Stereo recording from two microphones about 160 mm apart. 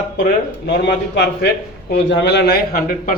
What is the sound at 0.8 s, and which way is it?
A man's voice, 90° left.